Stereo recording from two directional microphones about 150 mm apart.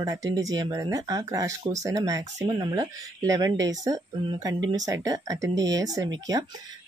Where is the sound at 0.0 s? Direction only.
25° right (ahead or behind).